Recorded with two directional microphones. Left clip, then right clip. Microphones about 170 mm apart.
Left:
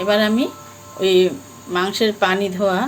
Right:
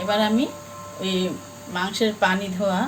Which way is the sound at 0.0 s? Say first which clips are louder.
Left 4 dB; 45° left (ahead or behind).